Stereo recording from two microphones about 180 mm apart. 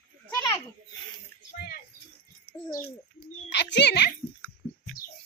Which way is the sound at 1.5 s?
55° left (ahead or behind).